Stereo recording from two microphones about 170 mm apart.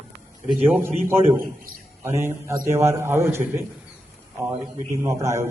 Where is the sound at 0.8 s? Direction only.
15° right (ahead or behind).